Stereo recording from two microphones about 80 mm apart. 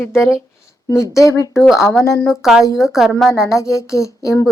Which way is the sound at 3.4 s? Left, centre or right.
Left.